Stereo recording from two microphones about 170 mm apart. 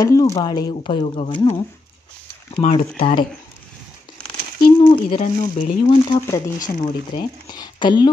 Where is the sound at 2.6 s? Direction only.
35° left (ahead or behind).